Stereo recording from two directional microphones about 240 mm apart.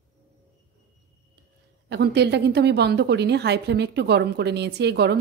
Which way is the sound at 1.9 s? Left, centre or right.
Right.